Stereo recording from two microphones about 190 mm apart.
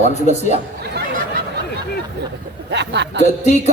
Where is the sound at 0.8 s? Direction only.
60° right (ahead or behind).